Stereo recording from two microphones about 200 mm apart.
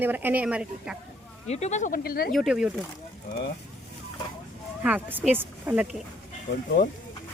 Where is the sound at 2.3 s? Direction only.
Centre (ahead or behind).